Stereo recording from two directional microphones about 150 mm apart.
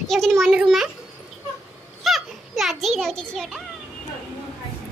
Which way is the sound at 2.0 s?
Centre (ahead or behind).